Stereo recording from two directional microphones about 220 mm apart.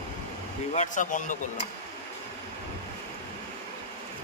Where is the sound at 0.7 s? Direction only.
35° left (ahead or behind).